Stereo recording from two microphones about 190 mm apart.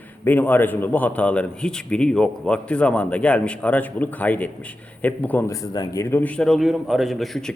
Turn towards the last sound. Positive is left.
turn(degrees=0)  # may be behind; listen again after turning